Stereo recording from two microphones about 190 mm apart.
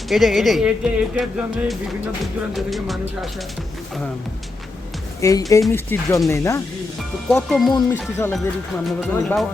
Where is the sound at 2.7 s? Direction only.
Centre (ahead or behind).